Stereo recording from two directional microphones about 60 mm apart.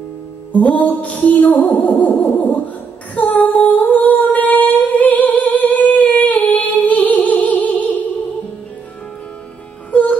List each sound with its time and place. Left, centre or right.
0.5 s music: left
3.2 s female singing: left
3.6 s humming: left